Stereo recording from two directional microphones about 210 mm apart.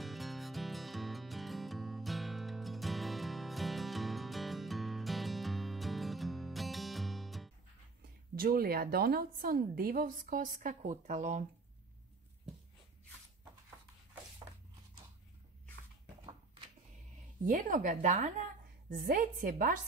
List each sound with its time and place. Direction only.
0.0 s music: centre (ahead or behind)
8.4 s speech: 45° right (ahead or behind)
17.5 s a woman's voice: 40° right (ahead or behind)